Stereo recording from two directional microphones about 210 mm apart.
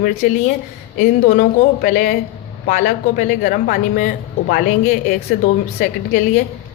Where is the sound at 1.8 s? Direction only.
40° left (ahead or behind).